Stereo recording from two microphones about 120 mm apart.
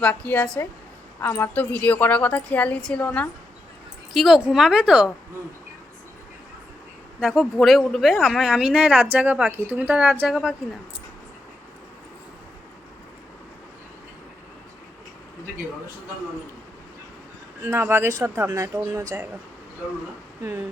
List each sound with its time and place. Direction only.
0.0 s a woman's voice: 10° left (ahead or behind)
1.2 s a woman's voice: 20° left (ahead or behind)
4.1 s speech: centre (ahead or behind)
7.2 s a woman's voice: centre (ahead or behind)
17.6 s speech: 20° right (ahead or behind)